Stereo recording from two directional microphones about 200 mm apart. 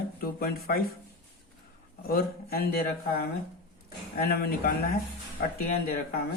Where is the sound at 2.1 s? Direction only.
50° left (ahead or behind).